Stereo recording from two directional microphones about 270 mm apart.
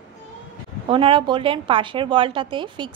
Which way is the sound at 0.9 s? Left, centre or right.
Centre.